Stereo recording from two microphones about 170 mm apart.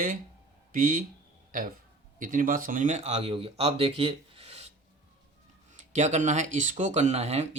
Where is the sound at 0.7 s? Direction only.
55° right (ahead or behind); by 4.7 s 35° right (ahead or behind).